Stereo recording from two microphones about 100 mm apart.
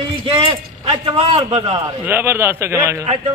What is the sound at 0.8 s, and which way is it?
A man's voice, 70° right (ahead or behind).